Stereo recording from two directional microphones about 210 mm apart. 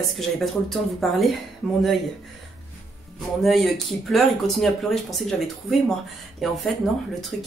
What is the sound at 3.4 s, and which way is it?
Speech, centre (ahead or behind).